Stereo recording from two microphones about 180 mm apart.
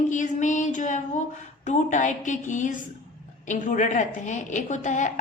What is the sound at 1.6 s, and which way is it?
A woman's voice, 45° left (ahead or behind).